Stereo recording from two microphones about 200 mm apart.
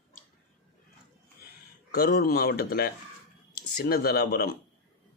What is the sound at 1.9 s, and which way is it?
A man's voice, 50° left (ahead or behind).